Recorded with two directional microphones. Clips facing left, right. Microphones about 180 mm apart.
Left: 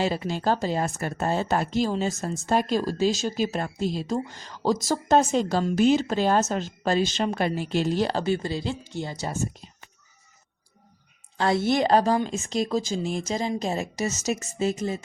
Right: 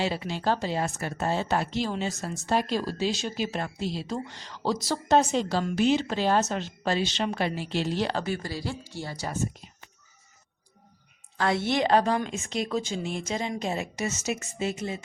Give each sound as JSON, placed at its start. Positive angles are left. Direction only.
{"t": 0.0, "sound": "speech", "side_deg": 45}
{"t": 8.1, "sound": "speech", "side_deg": 25}
{"t": 11.3, "sound": "a woman's voice", "side_deg": 35}